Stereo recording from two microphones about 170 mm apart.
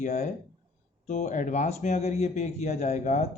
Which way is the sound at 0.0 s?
45° left (ahead or behind).